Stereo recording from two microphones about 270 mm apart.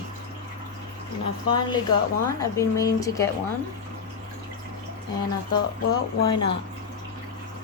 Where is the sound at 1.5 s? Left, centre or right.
Centre.